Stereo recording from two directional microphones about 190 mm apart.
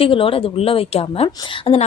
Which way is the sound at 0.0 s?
30° left (ahead or behind).